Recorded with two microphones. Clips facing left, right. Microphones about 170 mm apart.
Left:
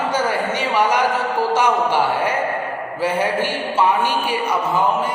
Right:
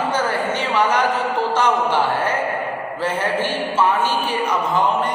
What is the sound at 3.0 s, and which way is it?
A man's voice, 10° left (ahead or behind).